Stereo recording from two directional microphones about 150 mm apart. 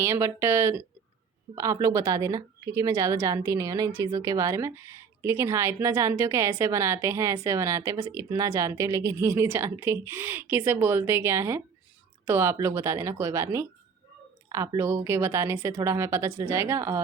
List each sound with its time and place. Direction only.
0.0 s a woman's voice: 15° right (ahead or behind)